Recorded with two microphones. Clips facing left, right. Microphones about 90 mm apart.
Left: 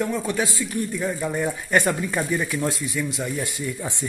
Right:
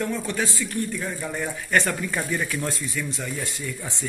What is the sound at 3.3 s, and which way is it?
Speech, 20° left (ahead or behind).